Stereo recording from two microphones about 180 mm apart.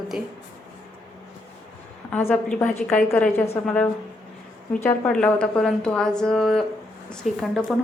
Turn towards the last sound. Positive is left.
turn(degrees=5)  # may be behind; listen again after turning